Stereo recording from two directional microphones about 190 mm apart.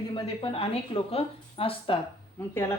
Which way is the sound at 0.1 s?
25° left (ahead or behind).